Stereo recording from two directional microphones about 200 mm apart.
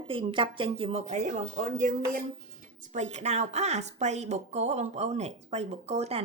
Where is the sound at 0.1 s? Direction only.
25° right (ahead or behind).